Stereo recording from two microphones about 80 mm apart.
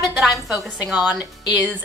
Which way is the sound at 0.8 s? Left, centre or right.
Centre.